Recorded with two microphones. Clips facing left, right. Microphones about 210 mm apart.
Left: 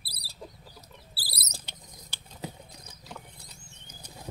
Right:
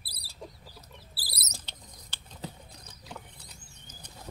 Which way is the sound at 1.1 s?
35° left (ahead or behind).